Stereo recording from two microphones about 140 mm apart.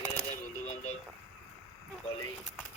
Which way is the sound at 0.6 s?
55° left (ahead or behind).